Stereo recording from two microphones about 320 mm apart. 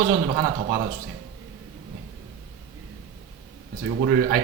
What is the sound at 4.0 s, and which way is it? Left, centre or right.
Speech, right.